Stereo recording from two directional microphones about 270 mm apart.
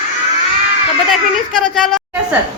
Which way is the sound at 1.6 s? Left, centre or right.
Centre.